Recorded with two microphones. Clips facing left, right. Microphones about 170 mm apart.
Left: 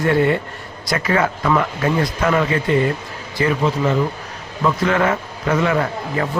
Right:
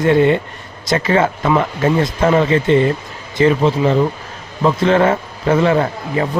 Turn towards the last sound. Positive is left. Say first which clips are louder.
# right 3 dB
turn(degrees=-25)  # may be behind; listen again after turning